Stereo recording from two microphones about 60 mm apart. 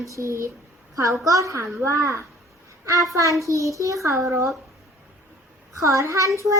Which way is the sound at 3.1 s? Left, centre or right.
Right.